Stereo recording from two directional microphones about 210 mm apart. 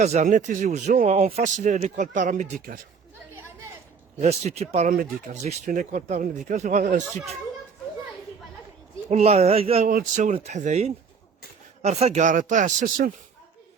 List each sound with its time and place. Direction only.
0.0 s speech: 35° right (ahead or behind)
4.2 s speech: 30° right (ahead or behind)
9.0 s speech: 30° right (ahead or behind)